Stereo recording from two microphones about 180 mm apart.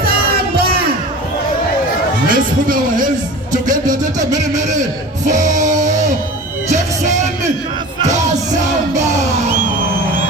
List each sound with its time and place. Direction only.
2.3 s a man's voice: 50° right (ahead or behind)
3.5 s music: 45° right (ahead or behind)
5.2 s music: 45° right (ahead or behind)